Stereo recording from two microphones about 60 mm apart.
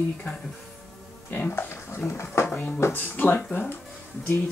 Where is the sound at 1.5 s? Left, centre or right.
Left.